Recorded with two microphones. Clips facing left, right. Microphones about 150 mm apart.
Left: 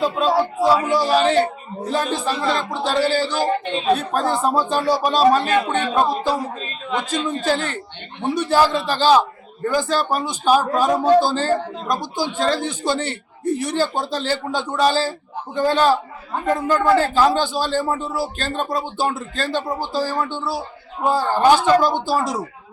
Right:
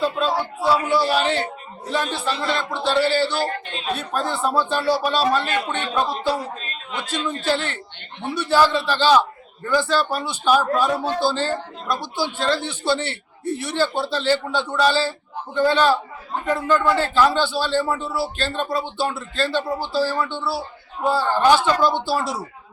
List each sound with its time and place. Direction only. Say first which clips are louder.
0.0 s a man's voice: left 3 dB; 40° left (ahead or behind)
16.6 s a man's voice: right 3 dB; 15° left (ahead or behind)
17.0 s a man's voice: left 1 dB; 45° left (ahead or behind)
21.5 s a man's voice: left 2 dB; 45° left (ahead or behind)